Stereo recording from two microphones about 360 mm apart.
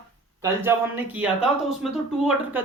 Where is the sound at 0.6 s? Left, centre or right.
Centre.